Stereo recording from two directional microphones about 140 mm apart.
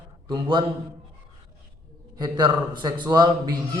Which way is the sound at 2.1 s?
30° right (ahead or behind).